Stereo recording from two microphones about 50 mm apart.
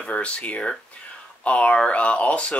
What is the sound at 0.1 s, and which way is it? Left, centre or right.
Speech, left.